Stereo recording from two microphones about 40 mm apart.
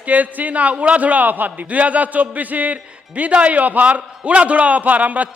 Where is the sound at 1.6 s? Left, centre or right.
Right.